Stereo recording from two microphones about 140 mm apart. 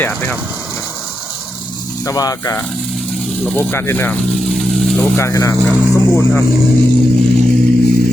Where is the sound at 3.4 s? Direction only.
15° left (ahead or behind).